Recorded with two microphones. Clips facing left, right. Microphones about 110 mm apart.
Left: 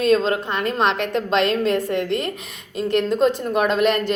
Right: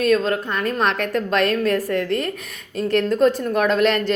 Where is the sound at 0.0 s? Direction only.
25° left (ahead or behind).